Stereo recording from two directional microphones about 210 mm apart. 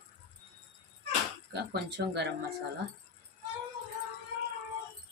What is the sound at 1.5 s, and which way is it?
Speech, 50° right (ahead or behind).